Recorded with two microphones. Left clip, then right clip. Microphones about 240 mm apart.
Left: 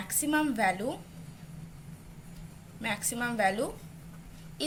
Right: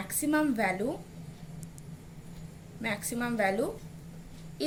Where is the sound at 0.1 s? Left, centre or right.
Centre.